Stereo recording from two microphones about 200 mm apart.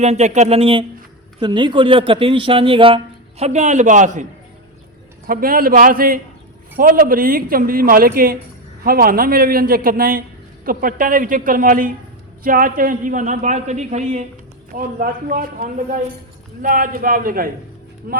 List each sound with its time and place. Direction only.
0.0 s a man's voice: 35° right (ahead or behind)